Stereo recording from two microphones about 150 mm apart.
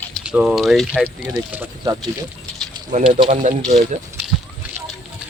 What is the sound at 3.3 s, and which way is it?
Speech, 55° right (ahead or behind).